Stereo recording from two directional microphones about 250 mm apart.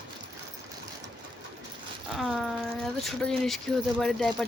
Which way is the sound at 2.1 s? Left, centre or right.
Centre.